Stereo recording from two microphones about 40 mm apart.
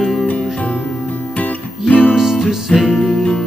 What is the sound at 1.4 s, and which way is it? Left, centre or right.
Music, left.